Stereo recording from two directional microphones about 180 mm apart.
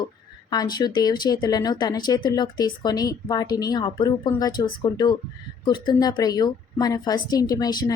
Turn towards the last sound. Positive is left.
turn(degrees=20)  # may be behind; listen again after turning